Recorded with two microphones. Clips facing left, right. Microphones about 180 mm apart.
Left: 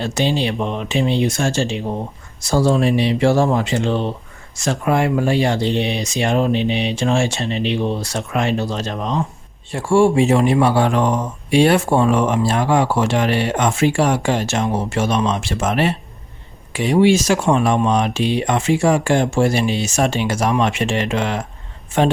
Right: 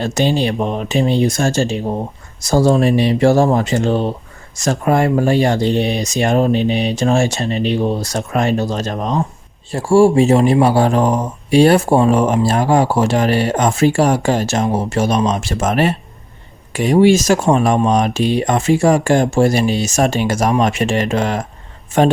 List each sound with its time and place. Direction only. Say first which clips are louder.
0.0 s speech: right 3 dB; 45° right (ahead or behind)